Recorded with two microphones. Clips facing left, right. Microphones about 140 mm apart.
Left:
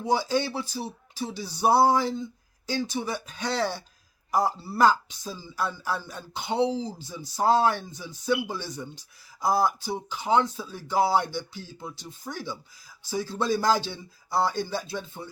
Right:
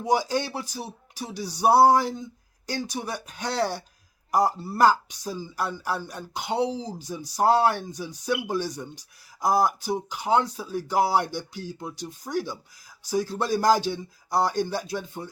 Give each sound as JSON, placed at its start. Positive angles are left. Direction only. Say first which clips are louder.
{"t": 0.0, "sound": "speech", "louder": "right 1 dB", "side_deg": -15}